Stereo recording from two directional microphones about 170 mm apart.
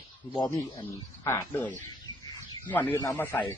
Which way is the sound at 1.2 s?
15° left (ahead or behind).